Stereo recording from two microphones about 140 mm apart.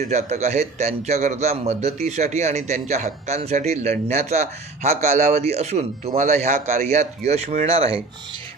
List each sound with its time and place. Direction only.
0.1 s a man's voice: 55° right (ahead or behind)